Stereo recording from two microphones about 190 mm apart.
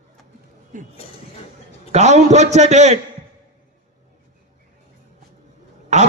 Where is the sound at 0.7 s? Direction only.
45° right (ahead or behind).